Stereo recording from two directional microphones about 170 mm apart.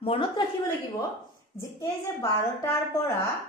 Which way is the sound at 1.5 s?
15° left (ahead or behind).